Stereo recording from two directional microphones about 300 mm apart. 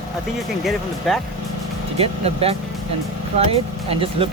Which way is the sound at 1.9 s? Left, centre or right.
Centre.